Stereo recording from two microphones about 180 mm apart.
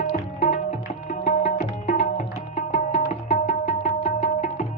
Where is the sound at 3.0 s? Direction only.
55° left (ahead or behind).